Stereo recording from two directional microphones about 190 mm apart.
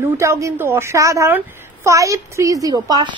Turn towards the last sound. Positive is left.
turn(degrees=-20)  # may be behind; listen again after turning